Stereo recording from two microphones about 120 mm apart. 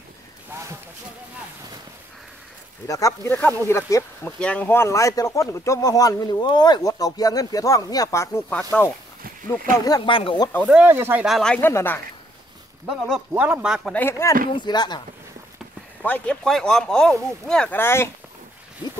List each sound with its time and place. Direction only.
0.5 s a sound: 25° right (ahead or behind)
2.9 s speech: 25° left (ahead or behind)
8.7 s speech: 10° left (ahead or behind)
10.0 s speech: 45° left (ahead or behind)
10.7 s speech: 10° right (ahead or behind)
11.2 s speech: 5° left (ahead or behind)
11.6 s speech: 20° left (ahead or behind)
12.8 s speech: centre (ahead or behind)
13.3 s speech: 10° right (ahead or behind)
13.9 s speech: 20° left (ahead or behind)
14.5 s speech: 40° left (ahead or behind)
16.0 s speech: 10° left (ahead or behind)
17.7 s speech: 20° left (ahead or behind)